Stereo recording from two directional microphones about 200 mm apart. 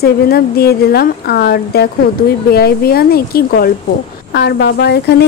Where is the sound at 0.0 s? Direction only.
50° left (ahead or behind).